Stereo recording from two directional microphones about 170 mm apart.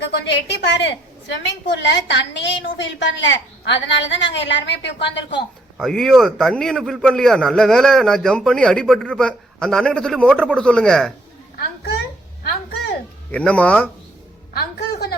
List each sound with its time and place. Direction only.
0.0 s a woman's voice: 90° left
5.7 s a man's voice: centre (ahead or behind)
13.3 s speech: 10° left (ahead or behind)
14.5 s music: 70° left (ahead or behind)